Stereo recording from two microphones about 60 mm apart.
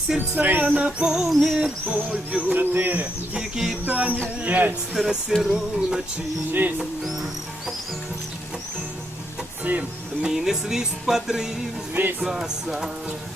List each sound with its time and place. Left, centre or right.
0.2 s speech: right; by 1.3 s centre
1.3 s a sound: centre
1.5 s speech: centre; by 3.1 s right
3.3 s music: centre
3.8 s speech: right
5.4 s music: centre
6.5 s speech: right
9.6 s speech: right
10.2 s music: centre